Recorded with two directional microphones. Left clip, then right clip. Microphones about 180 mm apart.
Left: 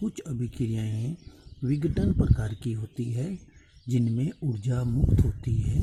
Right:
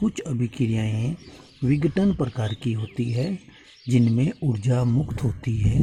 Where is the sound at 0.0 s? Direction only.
20° left (ahead or behind).